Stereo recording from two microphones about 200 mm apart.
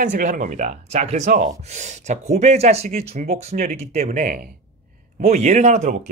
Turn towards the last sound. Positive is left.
turn(degrees=-35)  # may be behind; listen again after turning